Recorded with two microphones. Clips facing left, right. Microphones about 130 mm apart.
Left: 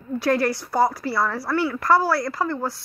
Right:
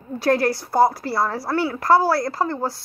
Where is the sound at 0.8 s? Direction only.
50° right (ahead or behind).